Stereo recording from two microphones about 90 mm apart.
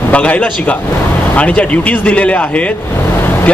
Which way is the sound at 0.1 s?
15° left (ahead or behind).